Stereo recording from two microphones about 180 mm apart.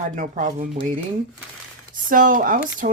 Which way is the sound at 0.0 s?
45° right (ahead or behind).